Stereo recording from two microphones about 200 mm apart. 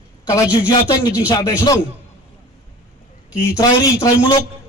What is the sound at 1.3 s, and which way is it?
Speech, 20° left (ahead or behind).